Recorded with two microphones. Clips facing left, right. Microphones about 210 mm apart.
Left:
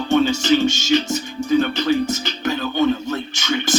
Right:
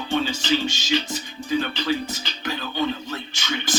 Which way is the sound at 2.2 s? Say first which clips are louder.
Left 8 dB; 45° left (ahead or behind).